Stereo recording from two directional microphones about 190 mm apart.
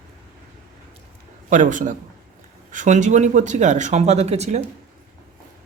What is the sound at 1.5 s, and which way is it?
Speech, 40° right (ahead or behind).